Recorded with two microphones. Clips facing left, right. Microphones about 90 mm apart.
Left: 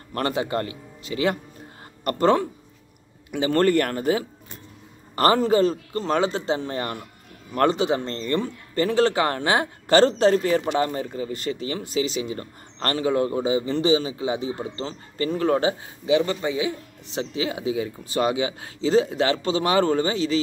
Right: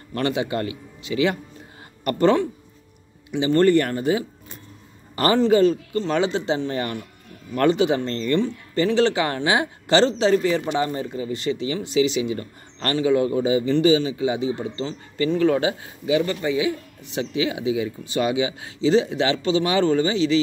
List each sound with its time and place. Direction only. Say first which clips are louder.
0.1 s speech: right 1 dB; 40° left (ahead or behind)
8.4 s speech: right 3 dB; 45° left (ahead or behind)